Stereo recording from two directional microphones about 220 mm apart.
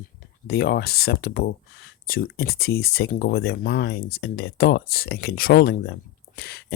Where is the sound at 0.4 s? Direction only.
45° left (ahead or behind).